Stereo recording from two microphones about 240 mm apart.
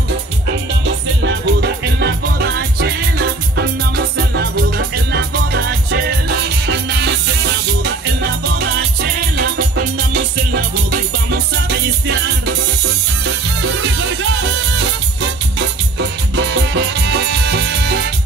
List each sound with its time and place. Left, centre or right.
1.2 s music: right